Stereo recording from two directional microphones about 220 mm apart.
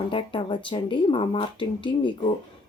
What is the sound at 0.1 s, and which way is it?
Speech, 20° left (ahead or behind).